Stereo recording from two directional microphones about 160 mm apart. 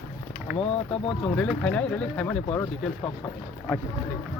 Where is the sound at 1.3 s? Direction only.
10° left (ahead or behind).